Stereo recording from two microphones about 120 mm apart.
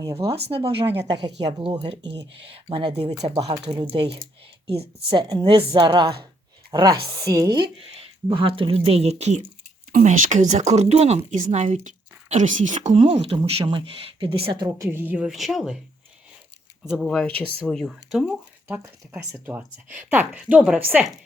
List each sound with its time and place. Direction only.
0.0 s speech: 25° right (ahead or behind)
0.3 s speech: 50° right (ahead or behind)
3.8 s speech: 45° right (ahead or behind)
8.3 s speech: 45° right (ahead or behind); by 9.4 s 65° right (ahead or behind)
10.0 s speech: 90° right
13.0 s speech: 55° right (ahead or behind)
13.7 s speech: 45° right (ahead or behind)
14.8 s speech: 15° right (ahead or behind)
17.0 s speech: 5° left (ahead or behind)
19.2 s speech: 20° right (ahead or behind)